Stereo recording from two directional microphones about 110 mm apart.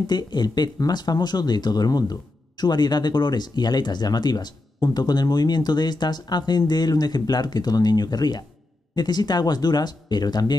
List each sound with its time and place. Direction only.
0.0 s speech: 40° left (ahead or behind)